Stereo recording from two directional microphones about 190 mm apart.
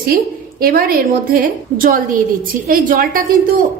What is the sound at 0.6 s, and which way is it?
A woman's voice, 50° right (ahead or behind).